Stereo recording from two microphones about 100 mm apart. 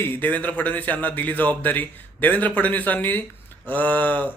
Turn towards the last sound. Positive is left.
turn(degrees=15)  # may be behind; listen again after turning